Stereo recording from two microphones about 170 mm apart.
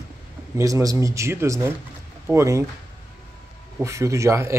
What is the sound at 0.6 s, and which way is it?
Speech, 20° right (ahead or behind).